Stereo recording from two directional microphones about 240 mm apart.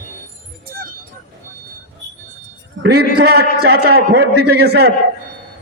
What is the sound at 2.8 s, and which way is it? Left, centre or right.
A man's voice, right.